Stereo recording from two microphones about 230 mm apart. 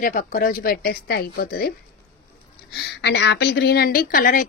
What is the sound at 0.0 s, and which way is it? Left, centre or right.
A woman's voice, left.